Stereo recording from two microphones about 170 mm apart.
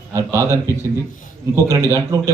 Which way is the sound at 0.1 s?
15° right (ahead or behind).